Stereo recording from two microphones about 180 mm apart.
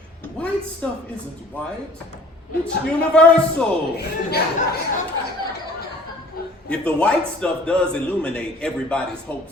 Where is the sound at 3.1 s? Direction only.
5° left (ahead or behind).